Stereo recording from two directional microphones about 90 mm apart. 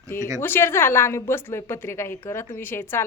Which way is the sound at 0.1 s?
25° left (ahead or behind).